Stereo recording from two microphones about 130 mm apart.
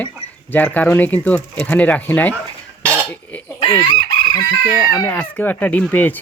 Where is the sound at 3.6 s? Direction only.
45° left (ahead or behind).